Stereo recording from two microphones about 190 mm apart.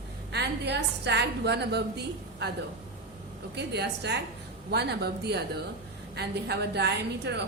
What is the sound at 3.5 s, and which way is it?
A woman's voice, 60° right (ahead or behind).